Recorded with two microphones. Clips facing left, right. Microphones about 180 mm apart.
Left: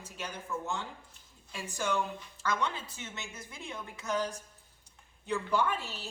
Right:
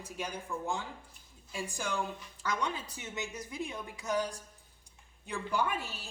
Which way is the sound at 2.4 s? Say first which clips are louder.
Left 2 dB; 15° right (ahead or behind).